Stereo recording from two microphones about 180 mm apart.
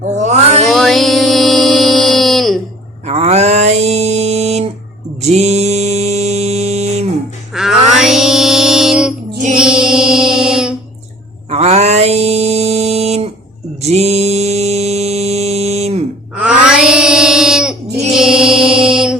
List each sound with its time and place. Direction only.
0.0 s a sound: 40° right (ahead or behind)
0.7 s music: centre (ahead or behind)
3.1 s mantra: 40° right (ahead or behind)
7.5 s music: centre (ahead or behind)
11.5 s mantra: 35° right (ahead or behind)
16.4 s wail: 5° right (ahead or behind)
18.1 s mantra: 5° right (ahead or behind)